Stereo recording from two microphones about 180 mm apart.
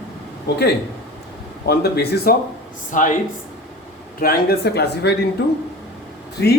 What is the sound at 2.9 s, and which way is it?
Speech, 45° left (ahead or behind).